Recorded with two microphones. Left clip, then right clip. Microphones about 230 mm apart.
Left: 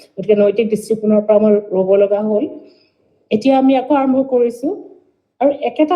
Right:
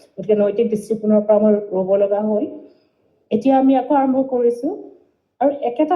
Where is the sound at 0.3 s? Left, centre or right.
Left.